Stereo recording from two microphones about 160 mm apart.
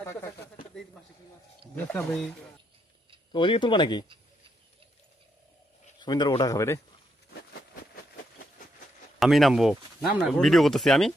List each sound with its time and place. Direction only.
0.0 s a sound: 15° left (ahead or behind)
1.7 s speech: 10° left (ahead or behind)
3.3 s speech: 30° left (ahead or behind)
6.0 s speech: 25° left (ahead or behind)
9.1 s speech: centre (ahead or behind)